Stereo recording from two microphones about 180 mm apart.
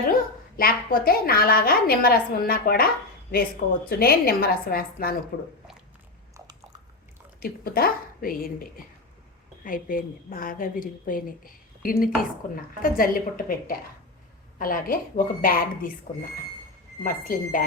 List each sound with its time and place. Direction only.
0.1 s a woman's voice: 55° left (ahead or behind)
6.3 s biting: 20° right (ahead or behind)
7.3 s a woman's voice: 55° left (ahead or behind)
9.6 s a woman's voice: 50° left (ahead or behind)
17.0 s a woman's voice: 50° left (ahead or behind)